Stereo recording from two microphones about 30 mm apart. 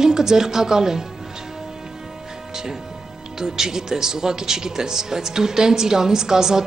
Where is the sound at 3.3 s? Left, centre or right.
Centre.